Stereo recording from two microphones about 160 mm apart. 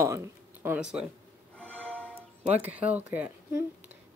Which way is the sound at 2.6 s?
10° right (ahead or behind).